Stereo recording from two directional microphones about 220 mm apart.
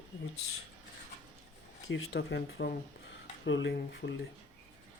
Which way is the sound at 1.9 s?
55° left (ahead or behind).